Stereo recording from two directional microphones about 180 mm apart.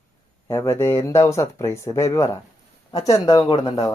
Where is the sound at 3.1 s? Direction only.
30° left (ahead or behind).